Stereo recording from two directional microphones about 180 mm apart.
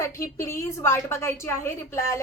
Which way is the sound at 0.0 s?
15° left (ahead or behind).